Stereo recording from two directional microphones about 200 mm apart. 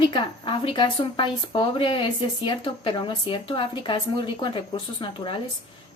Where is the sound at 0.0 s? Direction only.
25° left (ahead or behind).